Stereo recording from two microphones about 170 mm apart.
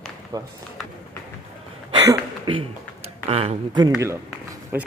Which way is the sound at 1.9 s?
30° right (ahead or behind).